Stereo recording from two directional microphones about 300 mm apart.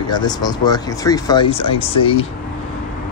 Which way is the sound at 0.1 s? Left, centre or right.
Centre.